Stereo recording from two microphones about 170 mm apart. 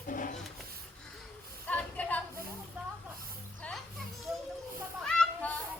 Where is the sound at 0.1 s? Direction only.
50° left (ahead or behind).